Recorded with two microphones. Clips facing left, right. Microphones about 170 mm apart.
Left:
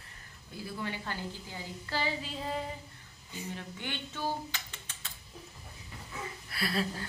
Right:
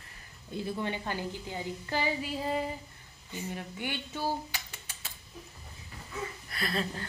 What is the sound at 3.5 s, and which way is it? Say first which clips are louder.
Speech: right 4 dB; 10° right (ahead or behind).